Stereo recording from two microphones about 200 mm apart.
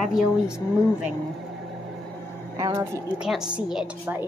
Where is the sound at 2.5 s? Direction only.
20° right (ahead or behind).